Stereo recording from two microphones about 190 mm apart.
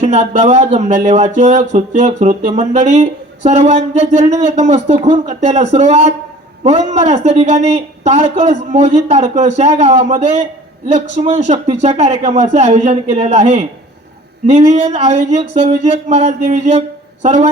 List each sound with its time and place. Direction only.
0.0 s speech: 35° right (ahead or behind)